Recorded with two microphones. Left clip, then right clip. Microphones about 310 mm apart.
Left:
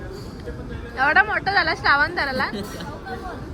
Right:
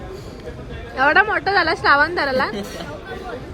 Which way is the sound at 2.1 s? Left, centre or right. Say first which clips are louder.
Right 4 dB; right.